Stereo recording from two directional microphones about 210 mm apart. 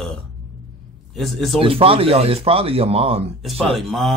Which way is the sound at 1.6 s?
25° right (ahead or behind).